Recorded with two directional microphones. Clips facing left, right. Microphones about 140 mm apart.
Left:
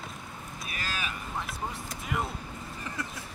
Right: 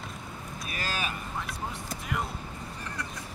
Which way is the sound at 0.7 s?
40° right (ahead or behind).